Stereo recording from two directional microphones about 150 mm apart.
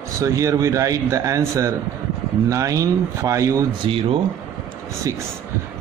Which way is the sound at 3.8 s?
35° right (ahead or behind).